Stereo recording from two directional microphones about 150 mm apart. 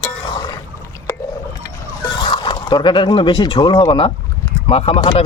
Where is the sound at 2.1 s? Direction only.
30° left (ahead or behind).